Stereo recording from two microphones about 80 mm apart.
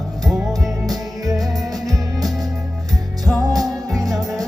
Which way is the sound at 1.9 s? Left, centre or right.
Right.